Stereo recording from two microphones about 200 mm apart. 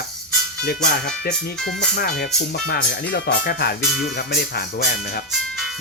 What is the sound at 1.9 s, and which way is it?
Speech, 50° left (ahead or behind).